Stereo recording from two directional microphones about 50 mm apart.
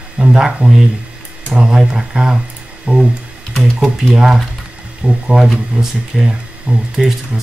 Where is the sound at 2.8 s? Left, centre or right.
Centre.